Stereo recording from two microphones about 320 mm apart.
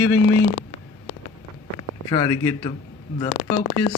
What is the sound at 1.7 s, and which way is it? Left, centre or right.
Speech, centre.